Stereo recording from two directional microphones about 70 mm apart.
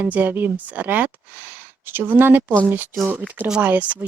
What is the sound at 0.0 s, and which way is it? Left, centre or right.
Speech, right.